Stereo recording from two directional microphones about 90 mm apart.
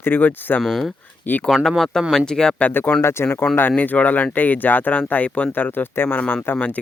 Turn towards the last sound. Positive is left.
turn(degrees=20)  # may be behind; listen again after turning